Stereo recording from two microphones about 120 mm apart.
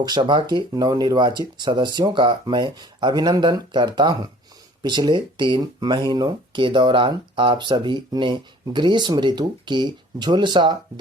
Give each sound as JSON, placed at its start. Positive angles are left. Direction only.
{"t": 0.0, "sound": "speech", "side_deg": -40}